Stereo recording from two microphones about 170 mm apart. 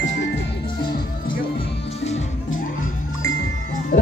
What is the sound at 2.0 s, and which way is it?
Music, 40° left (ahead or behind).